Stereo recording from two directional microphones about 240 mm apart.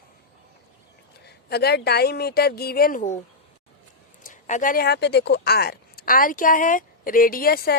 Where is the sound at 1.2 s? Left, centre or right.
Left.